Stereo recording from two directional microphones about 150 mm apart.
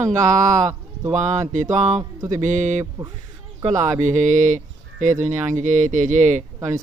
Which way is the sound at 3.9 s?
55° right (ahead or behind).